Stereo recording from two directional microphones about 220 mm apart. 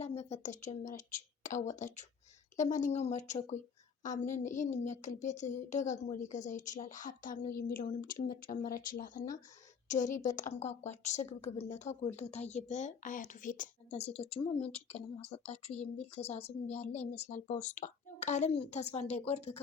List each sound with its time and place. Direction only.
0.0 s a woman's voice: 30° left (ahead or behind)